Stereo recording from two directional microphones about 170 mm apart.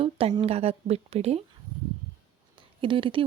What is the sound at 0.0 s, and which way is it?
Speech, 35° right (ahead or behind).